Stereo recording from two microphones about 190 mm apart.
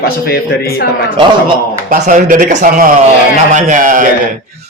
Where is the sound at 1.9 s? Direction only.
40° right (ahead or behind).